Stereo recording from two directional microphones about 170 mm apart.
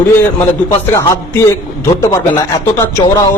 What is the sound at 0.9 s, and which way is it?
Speech, 20° left (ahead or behind).